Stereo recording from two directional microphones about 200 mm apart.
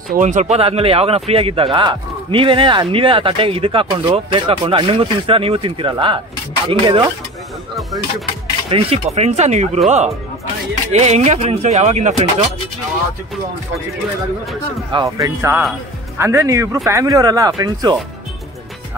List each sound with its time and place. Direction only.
0.1 s speech: 40° right (ahead or behind)
8.6 s speech: 30° right (ahead or behind)
14.9 s speech: 20° right (ahead or behind)